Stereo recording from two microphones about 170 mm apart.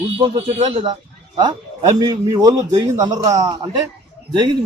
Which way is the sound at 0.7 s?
30° right (ahead or behind).